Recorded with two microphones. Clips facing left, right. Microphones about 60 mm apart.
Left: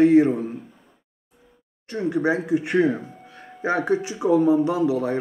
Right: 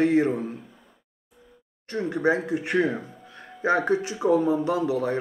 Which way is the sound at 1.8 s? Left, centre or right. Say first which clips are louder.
Left 4 dB; right.